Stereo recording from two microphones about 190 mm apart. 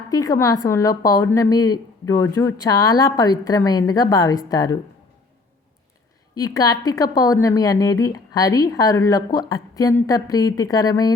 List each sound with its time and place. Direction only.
0.1 s a woman's voice: 20° left (ahead or behind)
6.3 s a woman's voice: 20° left (ahead or behind)